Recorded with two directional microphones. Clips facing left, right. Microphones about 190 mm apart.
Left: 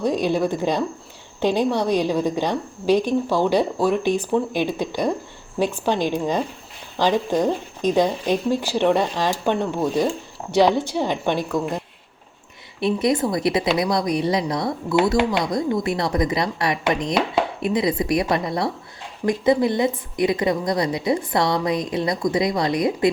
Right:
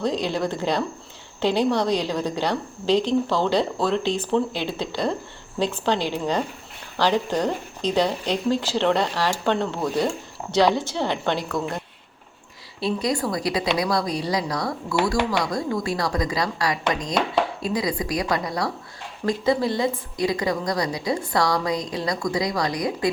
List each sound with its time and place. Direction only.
0.0 s a woman's voice: 15° left (ahead or behind)
12.8 s a woman's voice: 20° left (ahead or behind)